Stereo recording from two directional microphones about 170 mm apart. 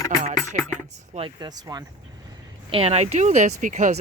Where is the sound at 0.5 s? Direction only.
45° right (ahead or behind).